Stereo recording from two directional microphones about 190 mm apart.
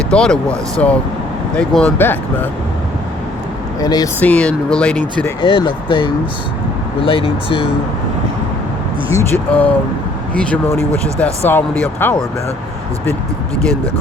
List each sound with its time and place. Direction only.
0.1 s speech: 5° left (ahead or behind)
3.8 s speech: 20° left (ahead or behind)
4.2 s speech: 5° left (ahead or behind)
5.4 s speech: 25° left (ahead or behind)
9.0 s speech: 15° left (ahead or behind)